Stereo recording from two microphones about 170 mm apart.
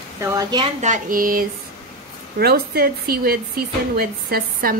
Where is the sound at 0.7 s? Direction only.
45° right (ahead or behind).